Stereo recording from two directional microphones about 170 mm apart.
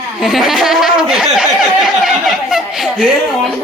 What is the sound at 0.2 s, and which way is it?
Speech, centre (ahead or behind).